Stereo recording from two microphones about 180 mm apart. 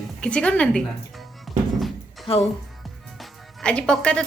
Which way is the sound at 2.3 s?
35° left (ahead or behind).